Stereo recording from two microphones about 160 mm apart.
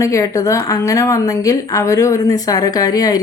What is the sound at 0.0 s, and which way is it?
Speech, 20° left (ahead or behind).